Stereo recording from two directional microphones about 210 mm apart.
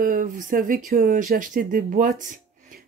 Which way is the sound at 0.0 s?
40° right (ahead or behind).